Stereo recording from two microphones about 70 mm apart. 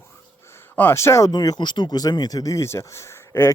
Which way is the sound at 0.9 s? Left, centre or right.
Left.